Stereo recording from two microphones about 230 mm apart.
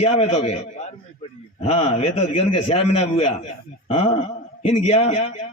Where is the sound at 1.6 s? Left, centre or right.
Left.